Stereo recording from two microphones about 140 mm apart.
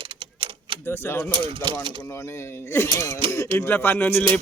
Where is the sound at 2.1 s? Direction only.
20° left (ahead or behind).